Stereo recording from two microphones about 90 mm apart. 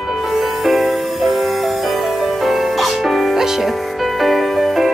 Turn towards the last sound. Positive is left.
turn(degrees=0)  # may be behind; listen again after turning